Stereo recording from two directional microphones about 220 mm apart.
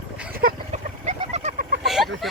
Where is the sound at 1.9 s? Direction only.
Centre (ahead or behind).